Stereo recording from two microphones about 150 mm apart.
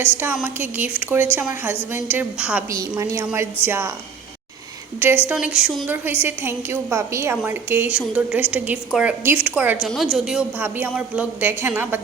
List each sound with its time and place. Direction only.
0.4 s a woman's voice: 15° right (ahead or behind)
2.6 s a woman's voice: 25° right (ahead or behind)
4.9 s a woman's voice: 15° right (ahead or behind)
5.9 s a woman's voice: 15° right (ahead or behind)
9.8 s a woman's voice: centre (ahead or behind)